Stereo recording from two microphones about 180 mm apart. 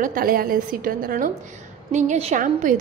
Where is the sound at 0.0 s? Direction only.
50° right (ahead or behind).